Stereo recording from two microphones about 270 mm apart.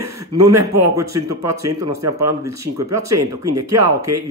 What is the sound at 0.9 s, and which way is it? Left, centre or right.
Speech, centre.